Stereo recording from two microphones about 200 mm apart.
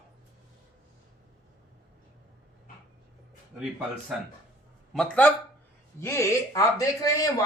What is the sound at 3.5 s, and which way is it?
Speech, 5° right (ahead or behind).